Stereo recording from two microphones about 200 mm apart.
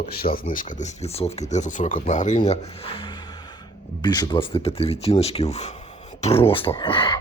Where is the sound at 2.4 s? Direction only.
30° left (ahead or behind).